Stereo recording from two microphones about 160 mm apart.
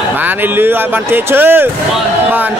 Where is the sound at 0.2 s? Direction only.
10° right (ahead or behind).